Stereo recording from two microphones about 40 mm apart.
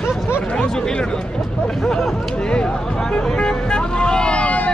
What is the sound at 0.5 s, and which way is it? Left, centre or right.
Speech, centre.